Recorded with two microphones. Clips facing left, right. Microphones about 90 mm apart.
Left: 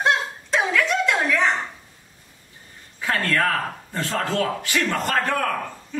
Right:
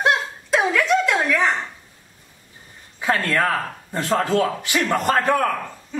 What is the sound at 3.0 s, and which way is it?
A man's voice, 20° right (ahead or behind).